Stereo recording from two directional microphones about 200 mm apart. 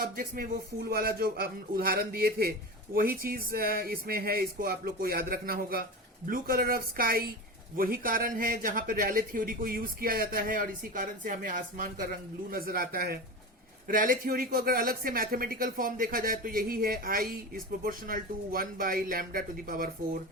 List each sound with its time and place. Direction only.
0.0 s speech: 45° right (ahead or behind)